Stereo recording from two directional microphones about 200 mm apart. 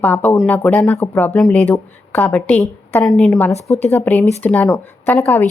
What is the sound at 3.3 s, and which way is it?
Speech, 15° left (ahead or behind).